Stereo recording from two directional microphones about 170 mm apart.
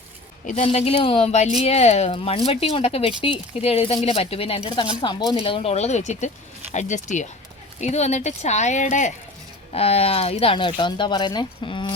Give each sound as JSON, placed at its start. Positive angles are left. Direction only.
{"t": 0.4, "sound": "speech", "side_deg": 45}